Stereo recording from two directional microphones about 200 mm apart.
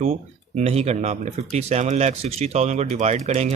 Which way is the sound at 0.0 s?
35° right (ahead or behind).